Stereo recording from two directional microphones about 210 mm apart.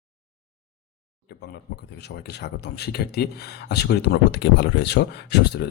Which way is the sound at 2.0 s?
50° left (ahead or behind).